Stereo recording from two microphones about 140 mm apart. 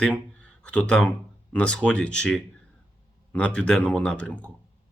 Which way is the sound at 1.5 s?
10° left (ahead or behind).